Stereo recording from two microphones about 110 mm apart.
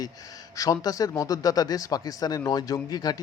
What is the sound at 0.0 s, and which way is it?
Speech, 35° left (ahead or behind).